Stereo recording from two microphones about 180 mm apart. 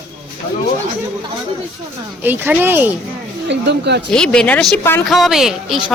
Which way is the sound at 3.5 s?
70° right (ahead or behind).